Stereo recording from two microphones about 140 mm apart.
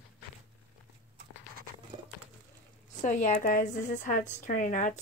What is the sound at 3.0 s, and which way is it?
A woman's voice, 60° left (ahead or behind).